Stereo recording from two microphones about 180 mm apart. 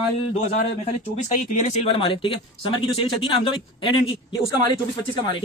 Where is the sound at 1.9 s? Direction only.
30° left (ahead or behind).